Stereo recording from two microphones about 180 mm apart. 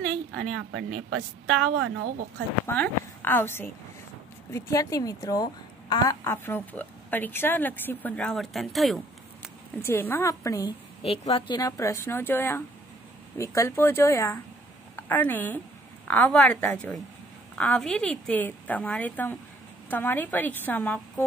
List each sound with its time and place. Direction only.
0.3 s a woman's voice: 85° right
2.6 s a woman's voice: 10° left (ahead or behind)
9.8 s a woman's voice: 15° left (ahead or behind)
11.0 s a woman's voice: 30° left (ahead or behind); by 21.0 s 10° left (ahead or behind)